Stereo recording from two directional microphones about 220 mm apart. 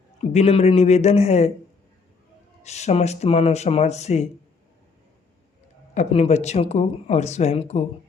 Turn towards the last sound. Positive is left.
turn(degrees=30)  # may be behind; listen again after turning